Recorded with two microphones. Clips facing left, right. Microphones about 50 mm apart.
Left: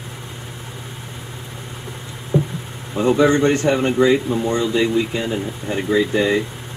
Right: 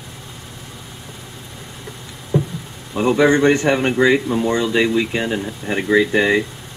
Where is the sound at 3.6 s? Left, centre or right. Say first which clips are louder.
Even; right.